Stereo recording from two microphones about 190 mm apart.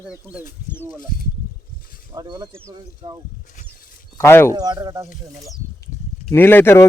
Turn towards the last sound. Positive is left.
turn(degrees=15)  # may be behind; listen again after turning